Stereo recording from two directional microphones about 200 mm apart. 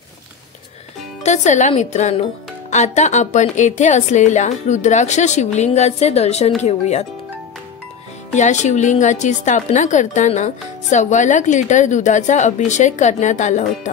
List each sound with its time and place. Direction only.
1.2 s a woman's voice: 35° left (ahead or behind)
8.4 s a woman's voice: 35° left (ahead or behind)